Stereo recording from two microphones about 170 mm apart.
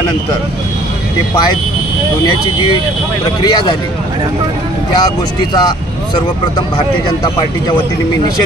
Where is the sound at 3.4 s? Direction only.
25° left (ahead or behind).